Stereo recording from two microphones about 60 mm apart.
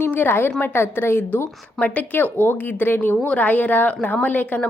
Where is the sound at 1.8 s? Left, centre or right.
Left.